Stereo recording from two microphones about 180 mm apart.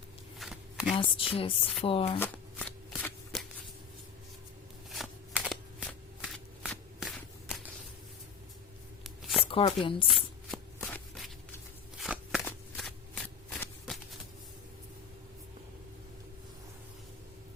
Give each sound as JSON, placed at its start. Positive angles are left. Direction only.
{"t": 0.3, "sound": "shuffling cards", "side_deg": 0}
{"t": 0.9, "sound": "a woman's voice", "side_deg": 30}
{"t": 2.1, "sound": "shuffling cards", "side_deg": 10}
{"t": 4.9, "sound": "shuffling cards", "side_deg": -5}
{"t": 9.0, "sound": "a sound", "side_deg": 0}
{"t": 9.5, "sound": "a woman's voice", "side_deg": 30}
{"t": 10.1, "sound": "shuffling cards", "side_deg": 0}
{"t": 12.5, "sound": "walk", "side_deg": 0}
{"t": 13.6, "sound": "shuffling cards", "side_deg": 0}